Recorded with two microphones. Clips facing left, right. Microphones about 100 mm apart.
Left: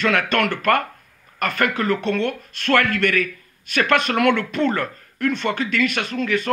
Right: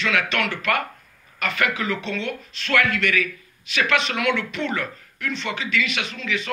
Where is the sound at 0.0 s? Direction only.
50° left (ahead or behind).